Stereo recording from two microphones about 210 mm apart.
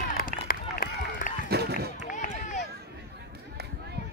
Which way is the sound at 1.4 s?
50° right (ahead or behind).